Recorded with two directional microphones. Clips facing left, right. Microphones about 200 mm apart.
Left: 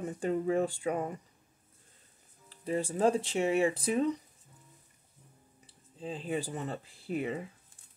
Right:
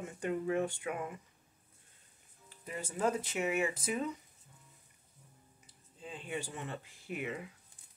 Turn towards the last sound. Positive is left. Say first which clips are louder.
# left 6 dB
turn(degrees=35)  # may be behind; listen again after turning